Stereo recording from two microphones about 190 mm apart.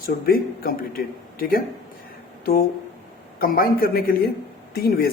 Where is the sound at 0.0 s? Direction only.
50° left (ahead or behind).